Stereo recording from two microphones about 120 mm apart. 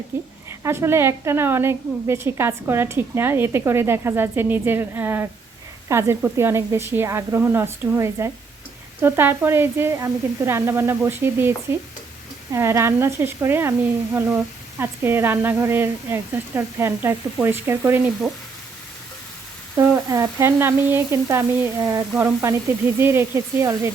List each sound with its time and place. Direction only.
0.6 s a woman's voice: 20° right (ahead or behind)
19.7 s a woman's voice: 25° right (ahead or behind)